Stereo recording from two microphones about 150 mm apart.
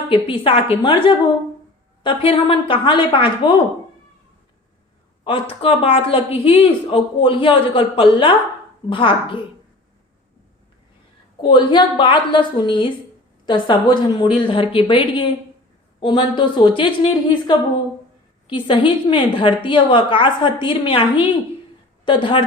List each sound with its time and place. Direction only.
0.1 s speech: 35° left (ahead or behind)
5.2 s speech: 35° left (ahead or behind)
11.4 s a woman's voice: 35° left (ahead or behind)